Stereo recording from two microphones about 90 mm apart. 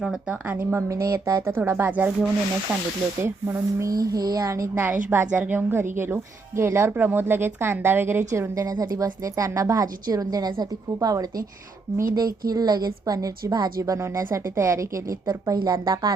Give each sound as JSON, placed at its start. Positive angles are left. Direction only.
{"t": 0.0, "sound": "a woman's voice", "side_deg": -5}
{"t": 0.4, "sound": "a woman's voice", "side_deg": -20}
{"t": 0.9, "sound": "a woman's voice", "side_deg": -35}
{"t": 3.2, "sound": "a woman's voice", "side_deg": -25}
{"t": 3.8, "sound": "a woman's voice", "side_deg": -45}
{"t": 5.7, "sound": "a woman's voice", "side_deg": -25}
{"t": 8.3, "sound": "a woman's voice", "side_deg": -40}